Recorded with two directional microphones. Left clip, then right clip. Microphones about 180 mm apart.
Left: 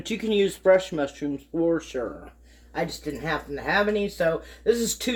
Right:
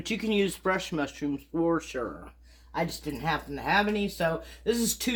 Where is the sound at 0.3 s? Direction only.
10° right (ahead or behind).